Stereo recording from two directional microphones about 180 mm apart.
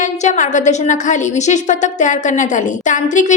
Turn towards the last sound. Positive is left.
turn(degrees=45)  # may be behind; listen again after turning